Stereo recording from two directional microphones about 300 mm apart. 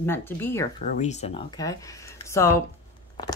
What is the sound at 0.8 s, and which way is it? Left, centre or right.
Speech, left.